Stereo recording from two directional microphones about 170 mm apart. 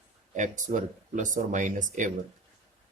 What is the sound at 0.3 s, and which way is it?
Speech, 50° right (ahead or behind).